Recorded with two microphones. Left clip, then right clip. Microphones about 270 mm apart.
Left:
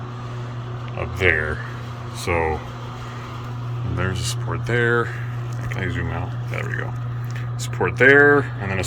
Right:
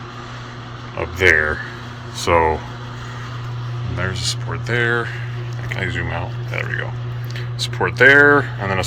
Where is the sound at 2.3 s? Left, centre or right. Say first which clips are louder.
Right 7 dB; right.